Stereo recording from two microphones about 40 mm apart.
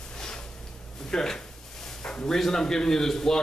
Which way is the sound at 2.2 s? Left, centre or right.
Centre.